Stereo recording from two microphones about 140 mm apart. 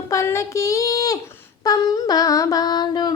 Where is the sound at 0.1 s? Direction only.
20° left (ahead or behind).